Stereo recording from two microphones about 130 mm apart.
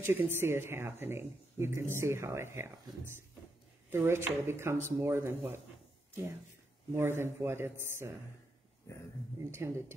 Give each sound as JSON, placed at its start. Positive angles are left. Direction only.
{"t": 0.0, "sound": "speech", "side_deg": -15}
{"t": 3.9, "sound": "speech", "side_deg": -20}
{"t": 6.9, "sound": "speech", "side_deg": -20}
{"t": 9.5, "sound": "speech", "side_deg": -20}